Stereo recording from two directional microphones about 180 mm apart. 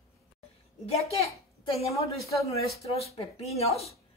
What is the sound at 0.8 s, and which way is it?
A woman's voice, 35° left (ahead or behind).